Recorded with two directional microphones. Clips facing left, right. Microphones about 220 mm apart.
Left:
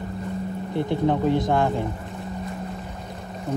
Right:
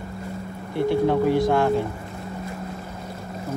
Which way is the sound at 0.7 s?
20° left (ahead or behind).